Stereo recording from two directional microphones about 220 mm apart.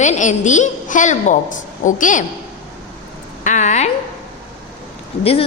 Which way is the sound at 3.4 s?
35° left (ahead or behind).